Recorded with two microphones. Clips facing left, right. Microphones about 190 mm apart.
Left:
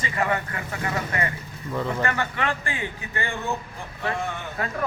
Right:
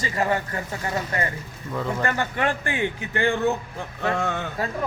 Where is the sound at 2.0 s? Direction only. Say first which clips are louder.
Right 2 dB; 50° right (ahead or behind); by 4.4 s 80° right.